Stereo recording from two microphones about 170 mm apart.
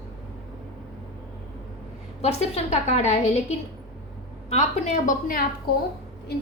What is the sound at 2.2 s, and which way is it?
Speech, 40° left (ahead or behind).